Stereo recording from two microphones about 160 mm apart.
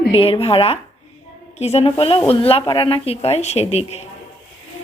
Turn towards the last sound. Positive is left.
turn(degrees=40)  # may be behind; listen again after turning